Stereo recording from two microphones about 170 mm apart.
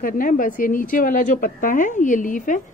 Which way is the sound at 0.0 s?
55° left (ahead or behind).